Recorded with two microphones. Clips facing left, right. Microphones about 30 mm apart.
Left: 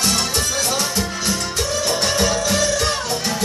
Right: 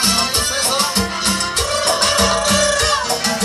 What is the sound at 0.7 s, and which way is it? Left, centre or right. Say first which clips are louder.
Music: right 3 dB; right.